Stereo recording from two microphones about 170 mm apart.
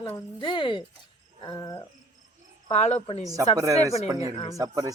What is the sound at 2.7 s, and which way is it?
Speech, 40° left (ahead or behind).